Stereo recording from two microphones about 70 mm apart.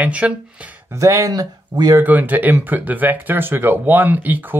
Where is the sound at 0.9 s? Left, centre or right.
Right.